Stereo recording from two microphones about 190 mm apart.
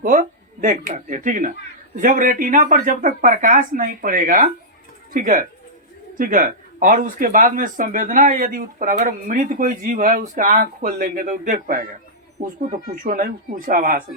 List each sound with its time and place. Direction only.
0.0 s speech: 40° right (ahead or behind)